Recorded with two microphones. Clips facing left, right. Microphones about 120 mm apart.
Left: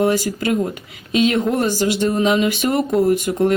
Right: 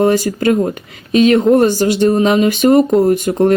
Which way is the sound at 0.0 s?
50° right (ahead or behind).